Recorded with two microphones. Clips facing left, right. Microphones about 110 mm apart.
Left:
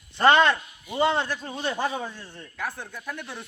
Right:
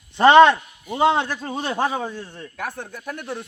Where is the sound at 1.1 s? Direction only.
75° right (ahead or behind); by 2.8 s 55° right (ahead or behind).